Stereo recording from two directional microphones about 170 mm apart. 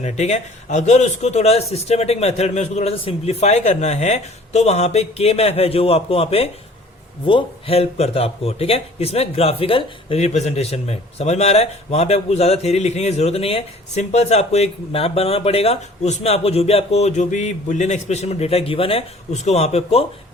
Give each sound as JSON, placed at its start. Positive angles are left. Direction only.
{"t": 0.0, "sound": "a man's voice", "side_deg": 40}